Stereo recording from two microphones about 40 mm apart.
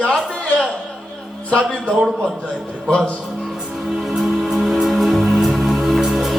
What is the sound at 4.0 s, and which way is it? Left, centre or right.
Music, centre.